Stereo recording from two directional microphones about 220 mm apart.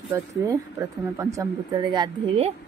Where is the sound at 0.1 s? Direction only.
15° right (ahead or behind).